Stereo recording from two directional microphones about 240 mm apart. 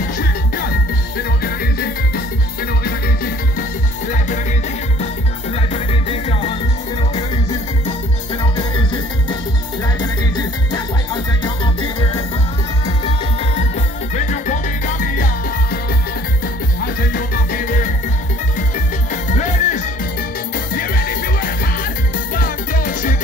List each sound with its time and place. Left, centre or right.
1.1 s music: left
5.7 s music: left
9.9 s music: centre
14.1 s music: left
16.8 s music: left
19.2 s music: left